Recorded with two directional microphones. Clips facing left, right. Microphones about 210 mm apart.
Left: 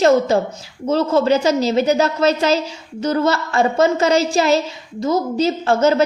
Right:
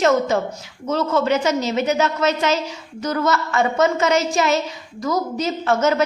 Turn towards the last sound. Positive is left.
turn(degrees=30)  # may be behind; listen again after turning